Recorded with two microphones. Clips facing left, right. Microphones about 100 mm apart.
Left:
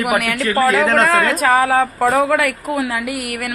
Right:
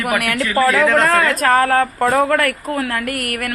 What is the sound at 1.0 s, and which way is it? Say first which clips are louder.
Speech: even; centre (ahead or behind).